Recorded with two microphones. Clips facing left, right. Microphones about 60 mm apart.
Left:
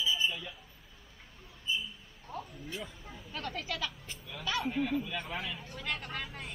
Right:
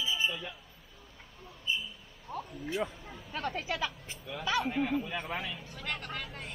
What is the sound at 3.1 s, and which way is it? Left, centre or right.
A man's voice, centre.